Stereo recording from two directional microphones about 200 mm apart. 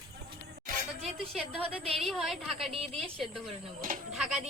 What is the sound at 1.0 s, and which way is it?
A woman's voice, centre (ahead or behind).